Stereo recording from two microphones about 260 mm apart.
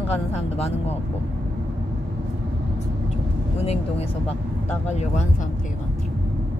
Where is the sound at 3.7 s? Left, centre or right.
Left.